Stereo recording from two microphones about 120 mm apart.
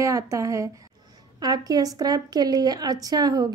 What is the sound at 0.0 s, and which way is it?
A woman's voice, 25° right (ahead or behind).